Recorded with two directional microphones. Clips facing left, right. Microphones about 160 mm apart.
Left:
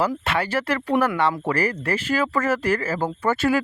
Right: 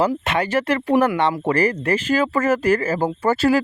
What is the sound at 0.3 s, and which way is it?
Speech, 15° right (ahead or behind).